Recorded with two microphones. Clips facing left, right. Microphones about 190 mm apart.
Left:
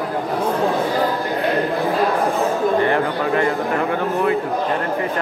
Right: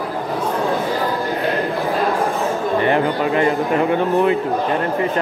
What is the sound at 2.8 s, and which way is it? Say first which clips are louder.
Speech: right 2 dB; 20° right (ahead or behind).